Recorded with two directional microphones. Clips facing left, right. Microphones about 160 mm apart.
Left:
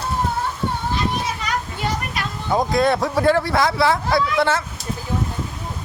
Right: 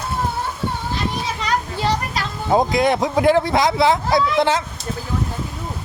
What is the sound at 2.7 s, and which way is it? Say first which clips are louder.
Speech: right 1 dB; 20° right (ahead or behind).